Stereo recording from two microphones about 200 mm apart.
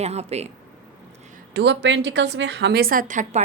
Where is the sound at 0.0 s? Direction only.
30° right (ahead or behind).